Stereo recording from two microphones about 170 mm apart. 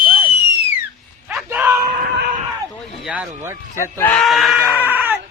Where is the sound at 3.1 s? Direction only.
5° right (ahead or behind).